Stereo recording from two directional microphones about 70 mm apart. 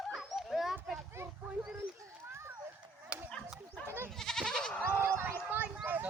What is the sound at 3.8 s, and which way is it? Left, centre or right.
Goat, right.